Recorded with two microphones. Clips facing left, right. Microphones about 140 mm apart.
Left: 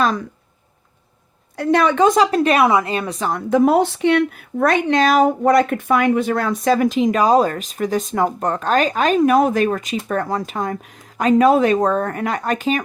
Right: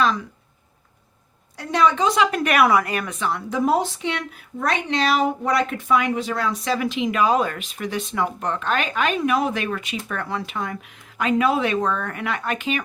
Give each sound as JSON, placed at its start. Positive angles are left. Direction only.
{"t": 1.5, "sound": "a woman's voice", "side_deg": 60}
{"t": 2.1, "sound": "a woman's voice", "side_deg": 30}